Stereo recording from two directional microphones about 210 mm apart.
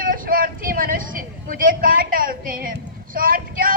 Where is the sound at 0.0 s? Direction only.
40° right (ahead or behind).